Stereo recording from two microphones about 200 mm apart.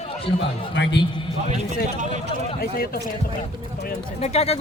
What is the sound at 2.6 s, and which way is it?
Speech, 50° left (ahead or behind).